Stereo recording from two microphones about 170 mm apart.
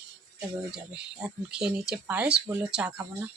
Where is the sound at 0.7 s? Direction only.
5° right (ahead or behind).